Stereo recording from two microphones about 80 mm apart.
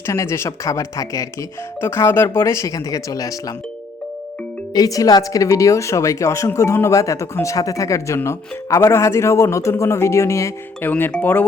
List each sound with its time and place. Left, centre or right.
0.0 s speech: left
1.8 s speech: left
4.7 s a woman's voice: left
10.8 s speech: left